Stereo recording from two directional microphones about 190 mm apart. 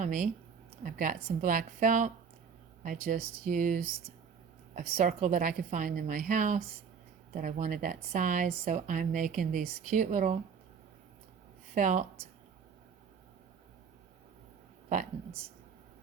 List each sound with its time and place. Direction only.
0.0 s speech: 40° right (ahead or behind)
11.7 s speech: 40° right (ahead or behind)